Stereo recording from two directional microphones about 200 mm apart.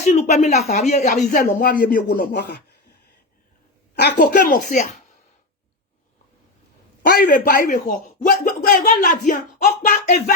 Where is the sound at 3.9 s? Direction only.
55° left (ahead or behind).